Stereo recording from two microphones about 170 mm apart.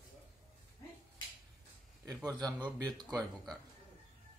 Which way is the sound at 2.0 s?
20° right (ahead or behind).